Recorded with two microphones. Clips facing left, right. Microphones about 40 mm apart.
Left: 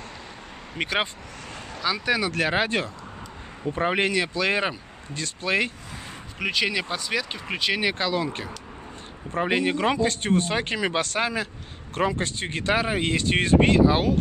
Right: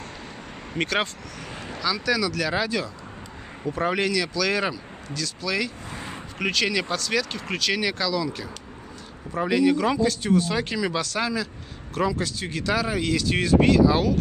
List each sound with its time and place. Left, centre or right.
0.7 s speech: centre
1.8 s speech: left
3.6 s speech: left
6.5 s speech: centre; by 14.1 s left